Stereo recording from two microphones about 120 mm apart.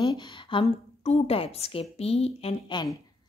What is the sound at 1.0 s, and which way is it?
A woman's voice, 60° left (ahead or behind).